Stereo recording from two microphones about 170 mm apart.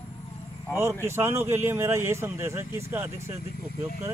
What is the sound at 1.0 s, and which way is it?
Speech, 15° right (ahead or behind).